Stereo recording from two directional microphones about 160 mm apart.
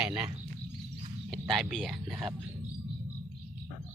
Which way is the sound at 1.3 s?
Centre (ahead or behind).